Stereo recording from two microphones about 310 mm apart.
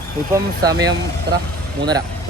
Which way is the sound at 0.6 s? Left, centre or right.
Centre.